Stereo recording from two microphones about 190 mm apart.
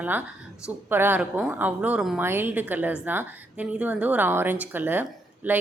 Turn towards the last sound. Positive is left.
turn(degrees=-10)  # may be behind; listen again after turning